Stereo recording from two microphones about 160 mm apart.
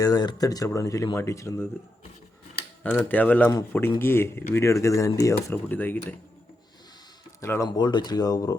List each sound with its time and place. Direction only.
0.0 s speech: 25° left (ahead or behind)
2.8 s speech: 10° left (ahead or behind)
7.4 s speech: 15° left (ahead or behind)
7.7 s speech: 30° left (ahead or behind)